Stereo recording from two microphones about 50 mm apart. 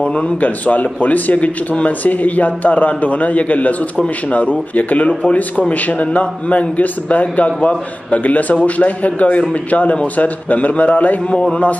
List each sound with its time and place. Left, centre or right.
0.0 s a man's voice: centre
0.4 s a man's voice: left